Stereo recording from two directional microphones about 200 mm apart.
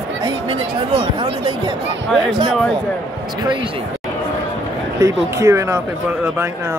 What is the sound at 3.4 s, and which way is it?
Speech, 20° right (ahead or behind).